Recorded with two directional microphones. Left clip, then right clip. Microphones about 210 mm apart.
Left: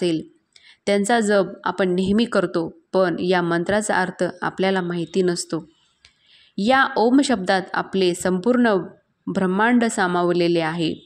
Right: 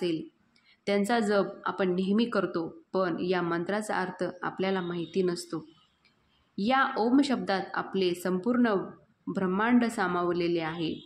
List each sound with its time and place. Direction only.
0.7 s a woman's voice: 35° left (ahead or behind)